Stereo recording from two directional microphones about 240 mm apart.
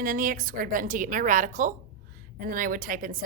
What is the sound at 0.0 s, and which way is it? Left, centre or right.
A woman's voice, right.